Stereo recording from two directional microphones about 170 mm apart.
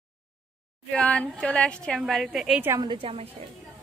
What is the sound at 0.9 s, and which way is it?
Speech, 5° left (ahead or behind).